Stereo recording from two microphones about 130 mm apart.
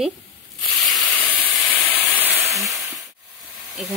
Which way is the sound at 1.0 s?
15° left (ahead or behind).